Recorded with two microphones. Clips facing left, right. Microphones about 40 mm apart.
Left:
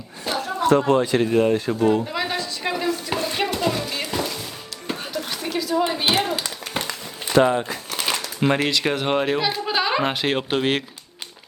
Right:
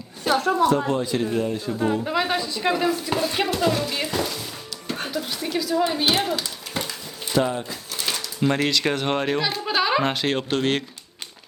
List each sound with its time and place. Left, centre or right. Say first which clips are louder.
0.3 s a sound: right 6 dB; right
0.6 s speech: left 3 dB; left
1.8 s speech: left 3 dB; left
2.0 s speech: right 2 dB; centre
3.1 s speech: right 1 dB; centre
4.9 s music: even; left
5.3 s a woman's voice: left 2 dB; centre
6.7 s crumpling: left 1 dB; left
8.1 s a sound: left 1 dB; left
8.6 s speech: left 1 dB; centre